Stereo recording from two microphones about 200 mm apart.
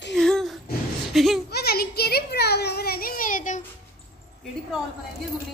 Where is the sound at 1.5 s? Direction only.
50° left (ahead or behind).